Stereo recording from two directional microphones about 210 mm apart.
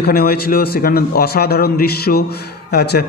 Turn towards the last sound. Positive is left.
turn(degrees=50)  # may be behind; listen again after turning